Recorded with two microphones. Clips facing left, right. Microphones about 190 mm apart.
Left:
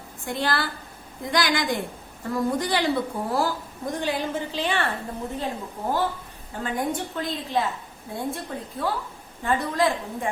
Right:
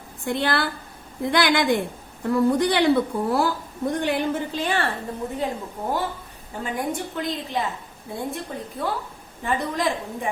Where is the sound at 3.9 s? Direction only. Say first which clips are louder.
Right 3 dB; 60° right (ahead or behind).